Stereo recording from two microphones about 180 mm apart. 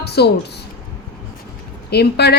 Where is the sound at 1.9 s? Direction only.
65° left (ahead or behind).